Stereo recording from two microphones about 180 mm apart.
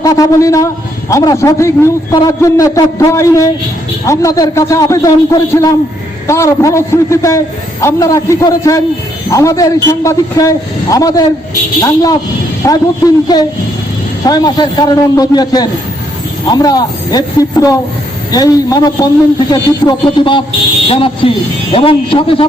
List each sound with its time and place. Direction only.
0.0 s a man's voice: 20° left (ahead or behind)